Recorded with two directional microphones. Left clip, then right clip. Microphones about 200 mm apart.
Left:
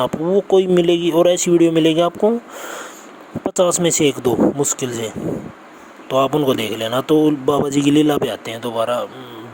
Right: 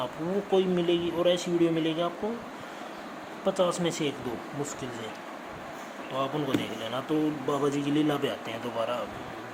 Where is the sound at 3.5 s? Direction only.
50° left (ahead or behind).